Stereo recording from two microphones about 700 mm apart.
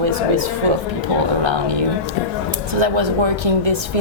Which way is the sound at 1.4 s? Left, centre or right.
Right.